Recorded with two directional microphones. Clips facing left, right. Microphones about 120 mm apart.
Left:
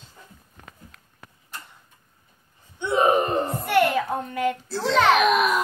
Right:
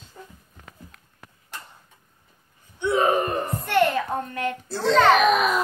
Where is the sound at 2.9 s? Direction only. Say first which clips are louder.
Left 1 dB; 20° left (ahead or behind).